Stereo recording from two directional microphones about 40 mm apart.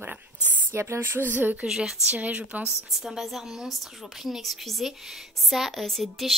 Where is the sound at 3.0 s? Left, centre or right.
Centre.